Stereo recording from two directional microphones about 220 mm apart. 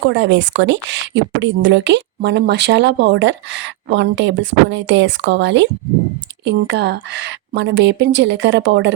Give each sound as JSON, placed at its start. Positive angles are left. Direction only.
{"t": 0.1, "sound": "speech", "side_deg": -55}